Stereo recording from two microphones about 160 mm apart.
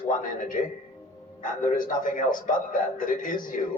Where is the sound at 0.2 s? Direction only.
55° left (ahead or behind).